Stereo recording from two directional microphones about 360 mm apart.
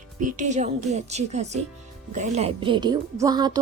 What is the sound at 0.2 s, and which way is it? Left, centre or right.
A woman's voice, right.